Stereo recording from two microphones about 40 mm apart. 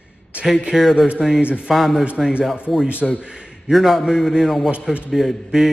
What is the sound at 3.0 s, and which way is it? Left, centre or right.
A man's voice, centre.